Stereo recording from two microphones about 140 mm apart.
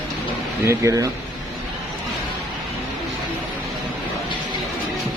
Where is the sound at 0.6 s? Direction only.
20° right (ahead or behind).